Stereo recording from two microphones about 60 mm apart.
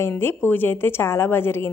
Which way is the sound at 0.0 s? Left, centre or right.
Left.